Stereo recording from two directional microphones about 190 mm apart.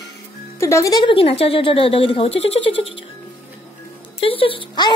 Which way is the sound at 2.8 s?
80° left.